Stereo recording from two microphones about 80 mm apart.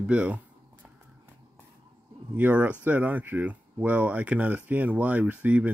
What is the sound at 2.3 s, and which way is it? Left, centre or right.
Speech, right.